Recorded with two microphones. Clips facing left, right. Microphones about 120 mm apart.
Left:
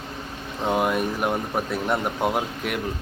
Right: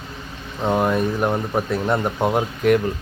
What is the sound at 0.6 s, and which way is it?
Speech, 5° left (ahead or behind).